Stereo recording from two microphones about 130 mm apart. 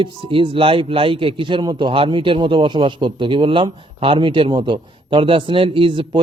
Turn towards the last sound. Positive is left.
turn(degrees=-40)  # may be behind; listen again after turning